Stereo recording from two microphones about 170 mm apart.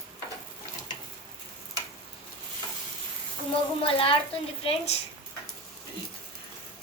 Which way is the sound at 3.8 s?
30° left (ahead or behind).